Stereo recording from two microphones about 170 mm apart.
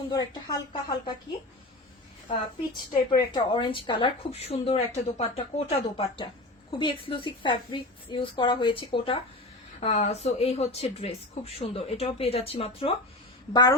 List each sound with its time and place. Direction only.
0.1 s a woman's voice: 25° left (ahead or behind)
3.1 s a woman's voice: 25° left (ahead or behind)
13.5 s a woman's voice: 20° left (ahead or behind)